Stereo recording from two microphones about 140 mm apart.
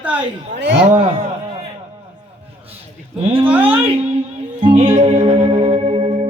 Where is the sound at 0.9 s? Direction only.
50° right (ahead or behind).